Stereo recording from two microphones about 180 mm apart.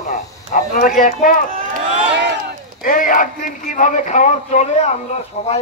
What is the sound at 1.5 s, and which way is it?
Run, 50° right (ahead or behind).